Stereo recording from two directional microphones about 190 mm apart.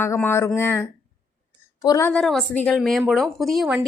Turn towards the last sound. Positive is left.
turn(degrees=0)  # may be behind; listen again after turning